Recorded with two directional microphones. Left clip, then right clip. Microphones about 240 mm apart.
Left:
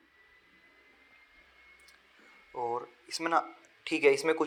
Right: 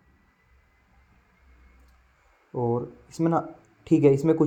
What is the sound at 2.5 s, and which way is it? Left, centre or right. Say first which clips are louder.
Speech: right 7 dB; left.